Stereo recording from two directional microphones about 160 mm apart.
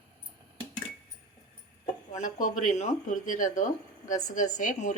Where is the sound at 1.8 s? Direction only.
50° left (ahead or behind).